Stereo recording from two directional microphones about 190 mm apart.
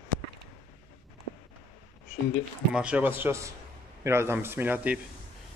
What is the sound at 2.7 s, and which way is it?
A man's voice, 5° right (ahead or behind).